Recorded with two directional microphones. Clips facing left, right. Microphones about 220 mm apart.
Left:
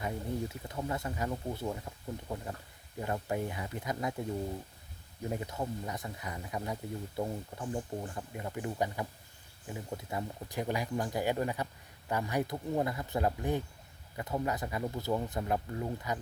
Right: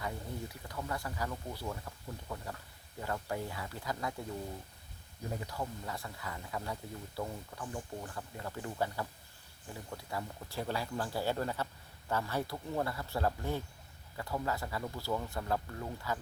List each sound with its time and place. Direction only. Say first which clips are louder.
0.0 s speech: left 5 dB; 25° left (ahead or behind)
5.3 s speech: left 3 dB; 20° left (ahead or behind)